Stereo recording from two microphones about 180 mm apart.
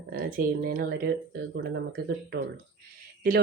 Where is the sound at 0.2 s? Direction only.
55° right (ahead or behind).